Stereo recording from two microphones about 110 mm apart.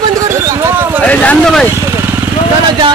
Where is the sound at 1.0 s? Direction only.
15° left (ahead or behind).